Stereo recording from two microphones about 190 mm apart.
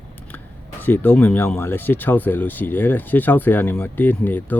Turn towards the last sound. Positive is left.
turn(degrees=10)  # may be behind; listen again after turning